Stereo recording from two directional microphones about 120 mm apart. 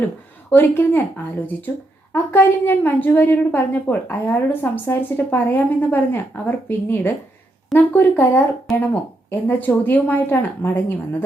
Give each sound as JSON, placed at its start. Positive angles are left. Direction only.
{"t": 0.5, "sound": "a woman's voice", "side_deg": 20}